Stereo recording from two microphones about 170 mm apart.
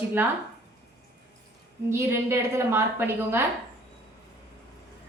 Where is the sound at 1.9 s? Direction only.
15° right (ahead or behind).